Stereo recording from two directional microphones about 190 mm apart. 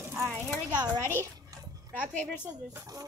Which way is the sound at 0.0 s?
15° right (ahead or behind).